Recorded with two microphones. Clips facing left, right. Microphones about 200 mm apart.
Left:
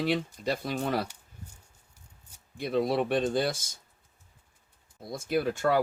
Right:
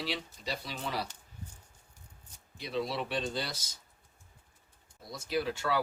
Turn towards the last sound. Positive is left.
turn(degrees=50)  # may be behind; listen again after turning